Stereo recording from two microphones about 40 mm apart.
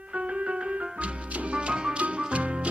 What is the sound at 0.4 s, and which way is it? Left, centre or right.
Music, right.